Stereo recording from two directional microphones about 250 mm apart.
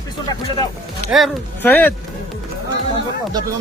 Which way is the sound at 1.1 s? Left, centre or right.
Centre.